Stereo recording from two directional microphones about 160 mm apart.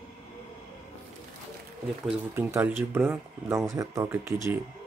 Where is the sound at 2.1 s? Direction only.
10° right (ahead or behind).